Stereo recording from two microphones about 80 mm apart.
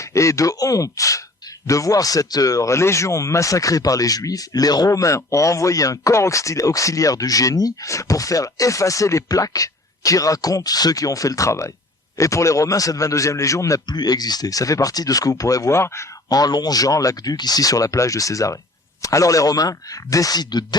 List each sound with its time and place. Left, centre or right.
0.0 s speech: left
4.9 s speech: left
13.8 s speech: left
16.3 s speech: left